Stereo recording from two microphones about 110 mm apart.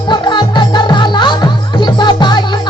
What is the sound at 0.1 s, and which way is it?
Music, 45° left (ahead or behind).